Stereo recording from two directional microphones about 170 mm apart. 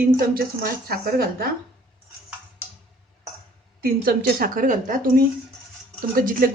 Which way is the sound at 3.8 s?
60° right (ahead or behind).